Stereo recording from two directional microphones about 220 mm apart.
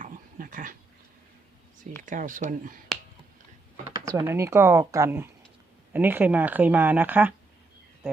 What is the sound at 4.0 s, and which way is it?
Speech, 15° right (ahead or behind).